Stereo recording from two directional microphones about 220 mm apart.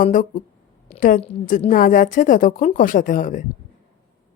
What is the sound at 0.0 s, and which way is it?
A woman's voice, 35° left (ahead or behind).